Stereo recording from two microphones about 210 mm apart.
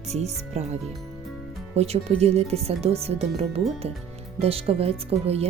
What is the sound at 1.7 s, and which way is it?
Speech, 30° right (ahead or behind).